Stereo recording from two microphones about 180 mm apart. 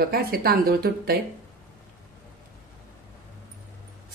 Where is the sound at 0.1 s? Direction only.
55° right (ahead or behind).